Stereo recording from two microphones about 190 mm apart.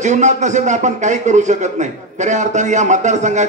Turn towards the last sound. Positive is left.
turn(degrees=-40)  # may be behind; listen again after turning